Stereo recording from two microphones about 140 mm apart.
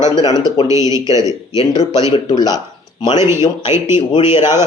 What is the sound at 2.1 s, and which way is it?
Speech, 35° left (ahead or behind).